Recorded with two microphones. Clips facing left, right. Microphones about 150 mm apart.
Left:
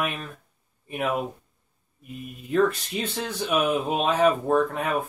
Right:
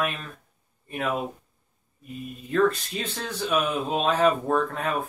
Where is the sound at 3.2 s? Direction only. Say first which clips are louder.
Left 1 dB; 15° left (ahead or behind).